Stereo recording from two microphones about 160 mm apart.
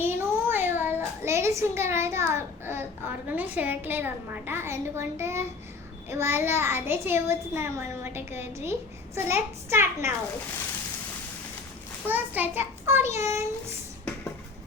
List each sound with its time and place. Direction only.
0.0 s child singing: 15° right (ahead or behind)
3.2 s a child's voice: 10° right (ahead or behind)
12.0 s a child's voice: 10° right (ahead or behind)